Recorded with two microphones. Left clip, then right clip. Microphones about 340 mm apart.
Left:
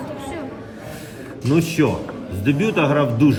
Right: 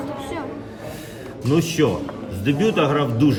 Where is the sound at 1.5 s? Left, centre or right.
Centre.